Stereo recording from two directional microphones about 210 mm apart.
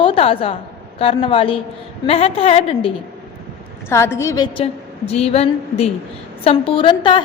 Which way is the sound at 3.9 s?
15° left (ahead or behind).